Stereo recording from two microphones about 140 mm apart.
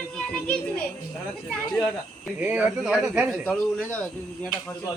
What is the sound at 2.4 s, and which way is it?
A man's voice, 10° right (ahead or behind).